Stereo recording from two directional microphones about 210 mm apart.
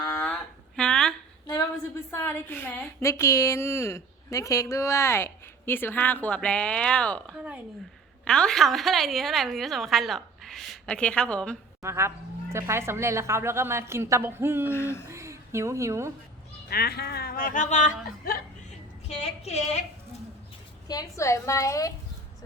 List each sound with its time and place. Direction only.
0.1 s a sound: 5° left (ahead or behind)
2.0 s a woman's voice: 10° left (ahead or behind)
7.3 s a woman's voice: 5° right (ahead or behind)
11.8 s speech: 15° right (ahead or behind)
14.7 s a woman's voice: 10° left (ahead or behind)
15.1 s a woman's voice: 15° right (ahead or behind)
16.6 s a woman's voice: 45° left (ahead or behind); by 19.8 s 30° left (ahead or behind)
20.8 s a woman's voice: 20° left (ahead or behind)